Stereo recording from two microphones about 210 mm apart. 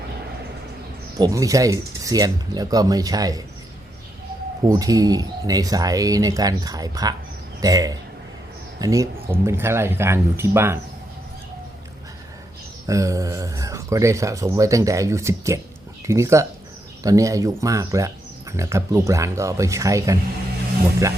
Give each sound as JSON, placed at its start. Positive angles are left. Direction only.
{"t": 1.2, "sound": "speech", "side_deg": -15}
{"t": 4.6, "sound": "speech", "side_deg": -15}
{"t": 12.9, "sound": "speech", "side_deg": -15}